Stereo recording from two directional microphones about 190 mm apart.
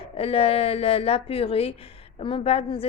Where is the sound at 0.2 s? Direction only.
30° left (ahead or behind).